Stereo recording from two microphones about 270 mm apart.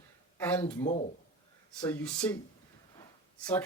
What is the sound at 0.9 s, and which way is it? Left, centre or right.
Speech, left.